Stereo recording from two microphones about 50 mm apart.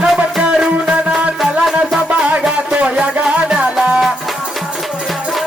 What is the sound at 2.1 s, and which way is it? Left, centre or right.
Music, right.